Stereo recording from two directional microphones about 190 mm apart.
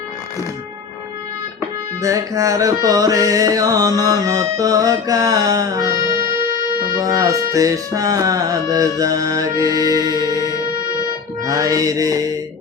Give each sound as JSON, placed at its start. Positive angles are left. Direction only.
{"t": 2.0, "sound": "music", "side_deg": -15}
{"t": 7.0, "sound": "music", "side_deg": -15}